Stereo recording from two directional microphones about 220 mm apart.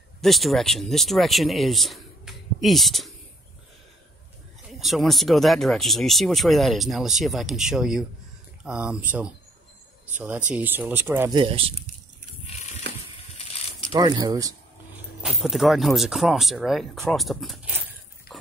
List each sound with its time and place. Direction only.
0.2 s speech: centre (ahead or behind)
4.7 s speech: centre (ahead or behind)
10.1 s speech: 10° right (ahead or behind)
11.3 s speech: 25° right (ahead or behind)
13.9 s speech: 20° right (ahead or behind)
15.2 s speech: centre (ahead or behind)
18.3 s a sound: 45° left (ahead or behind)